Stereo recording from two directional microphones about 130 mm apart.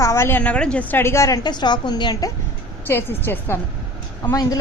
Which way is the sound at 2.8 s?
15° left (ahead or behind).